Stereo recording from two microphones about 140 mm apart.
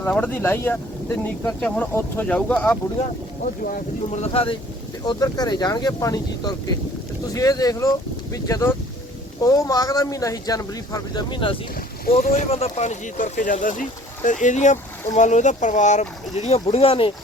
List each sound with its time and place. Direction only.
0.0 s speech: 15° left (ahead or behind)
3.4 s speech: 90° left
4.1 s speech: 45° left (ahead or behind)
5.0 s speech: 30° left (ahead or behind)
12.2 s speech: 80° left
12.5 s speech: 45° left (ahead or behind)